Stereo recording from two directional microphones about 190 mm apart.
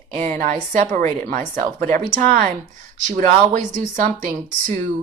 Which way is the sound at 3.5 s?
40° right (ahead or behind).